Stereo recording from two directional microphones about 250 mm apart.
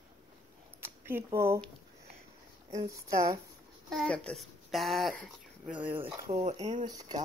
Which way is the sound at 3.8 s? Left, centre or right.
Centre.